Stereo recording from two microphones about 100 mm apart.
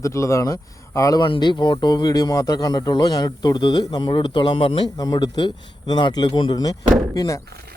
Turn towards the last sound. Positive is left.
turn(degrees=30)  # may be behind; listen again after turning